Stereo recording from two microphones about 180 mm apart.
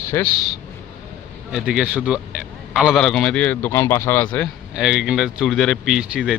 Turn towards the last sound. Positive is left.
turn(degrees=-5)  # may be behind; listen again after turning